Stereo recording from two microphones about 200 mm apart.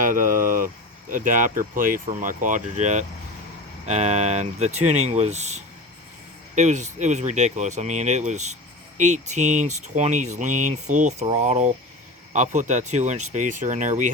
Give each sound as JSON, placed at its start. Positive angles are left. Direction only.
{"t": 0.0, "sound": "speech", "side_deg": -40}